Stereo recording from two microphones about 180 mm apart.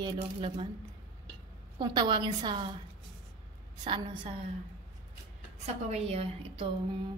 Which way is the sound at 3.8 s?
25° right (ahead or behind).